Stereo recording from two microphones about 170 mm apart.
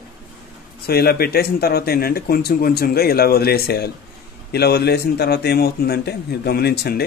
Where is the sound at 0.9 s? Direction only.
65° left (ahead or behind).